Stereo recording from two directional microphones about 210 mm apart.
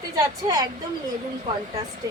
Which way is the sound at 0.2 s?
20° right (ahead or behind).